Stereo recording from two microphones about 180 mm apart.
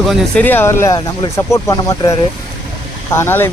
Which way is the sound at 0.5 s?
10° left (ahead or behind).